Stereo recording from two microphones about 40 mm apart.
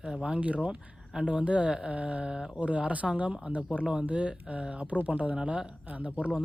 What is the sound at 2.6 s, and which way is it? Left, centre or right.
Speech, right.